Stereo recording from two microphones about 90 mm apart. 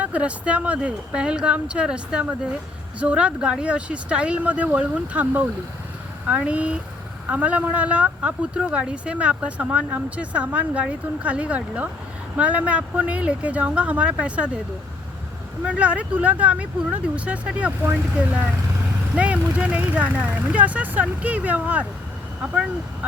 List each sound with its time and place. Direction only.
0.0 s speech: 15° right (ahead or behind)
15.6 s speech: 15° right (ahead or behind)
19.1 s speech: 15° right (ahead or behind)